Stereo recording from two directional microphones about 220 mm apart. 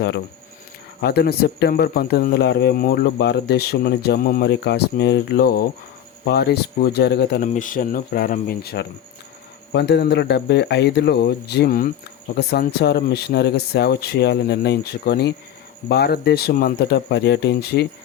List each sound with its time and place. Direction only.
1.0 s speech: 45° left (ahead or behind)
7.4 s speech: 35° left (ahead or behind)